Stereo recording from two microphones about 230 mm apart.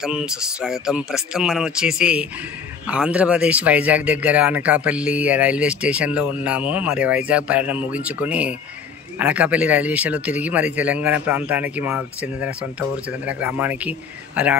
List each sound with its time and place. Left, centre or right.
0.0 s speech: centre